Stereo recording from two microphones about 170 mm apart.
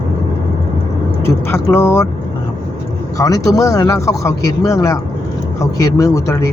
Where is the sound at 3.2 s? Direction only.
20° left (ahead or behind).